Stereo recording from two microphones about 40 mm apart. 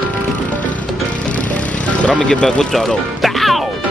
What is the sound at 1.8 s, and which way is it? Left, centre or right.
Speech, left.